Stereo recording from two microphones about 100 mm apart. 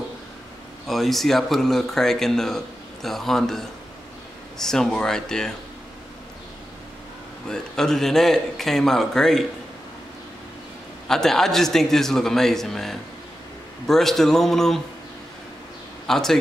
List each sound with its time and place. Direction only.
0.8 s speech: centre (ahead or behind)
7.4 s speech: 5° left (ahead or behind)
11.1 s speech: 5° left (ahead or behind)
16.1 s speech: 5° left (ahead or behind)